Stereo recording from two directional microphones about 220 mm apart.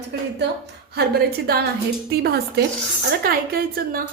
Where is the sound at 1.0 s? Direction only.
45° right (ahead or behind).